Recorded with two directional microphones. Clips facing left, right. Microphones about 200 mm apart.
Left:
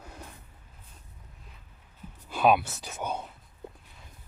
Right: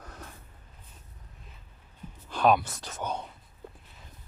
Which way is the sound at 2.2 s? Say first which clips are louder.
Even; 5° left (ahead or behind).